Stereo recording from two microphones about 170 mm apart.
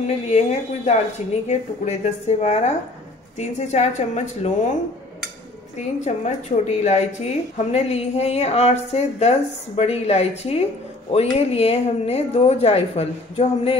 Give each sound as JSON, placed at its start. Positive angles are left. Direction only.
{"t": 0.0, "sound": "a woman's voice", "side_deg": 40}
{"t": 5.8, "sound": "a woman's voice", "side_deg": 40}